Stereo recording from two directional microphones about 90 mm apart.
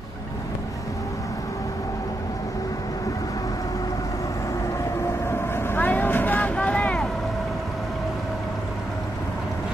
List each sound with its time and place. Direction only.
5.3 s vehicle: 25° left (ahead or behind)